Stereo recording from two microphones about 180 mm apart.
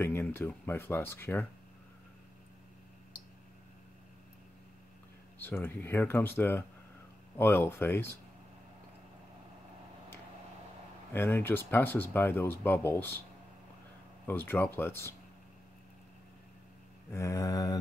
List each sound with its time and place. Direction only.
0.0 s speech: 10° left (ahead or behind)
5.4 s speech: 10° left (ahead or behind)
11.1 s speech: 10° left (ahead or behind)
14.2 s speech: 10° left (ahead or behind)
17.1 s mantra: 20° left (ahead or behind)